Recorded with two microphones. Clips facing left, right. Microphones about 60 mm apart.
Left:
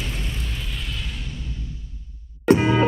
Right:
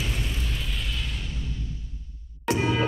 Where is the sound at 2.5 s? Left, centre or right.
Left.